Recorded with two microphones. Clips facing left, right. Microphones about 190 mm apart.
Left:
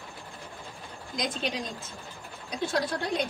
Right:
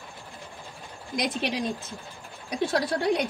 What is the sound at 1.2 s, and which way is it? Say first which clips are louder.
Speech: right 3 dB; 65° right (ahead or behind).